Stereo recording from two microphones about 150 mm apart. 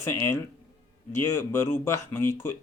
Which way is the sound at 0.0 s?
15° left (ahead or behind).